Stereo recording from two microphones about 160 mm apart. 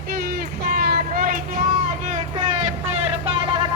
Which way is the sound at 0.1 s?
65° right (ahead or behind).